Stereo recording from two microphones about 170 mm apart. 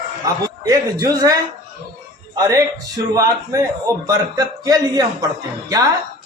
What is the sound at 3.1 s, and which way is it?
Speech, 20° right (ahead or behind).